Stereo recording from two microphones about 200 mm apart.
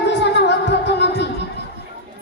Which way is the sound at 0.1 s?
60° left (ahead or behind).